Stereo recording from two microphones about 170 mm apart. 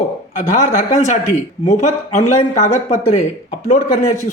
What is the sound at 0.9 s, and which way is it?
Speech, 40° left (ahead or behind).